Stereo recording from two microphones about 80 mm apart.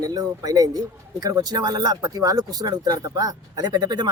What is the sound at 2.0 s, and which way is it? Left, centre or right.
Speech, right.